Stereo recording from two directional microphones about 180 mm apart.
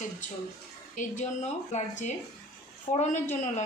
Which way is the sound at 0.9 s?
45° left (ahead or behind).